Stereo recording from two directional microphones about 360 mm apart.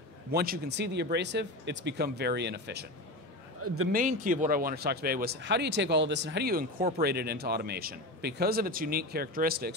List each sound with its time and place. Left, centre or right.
0.3 s speech: right
3.9 s speech: right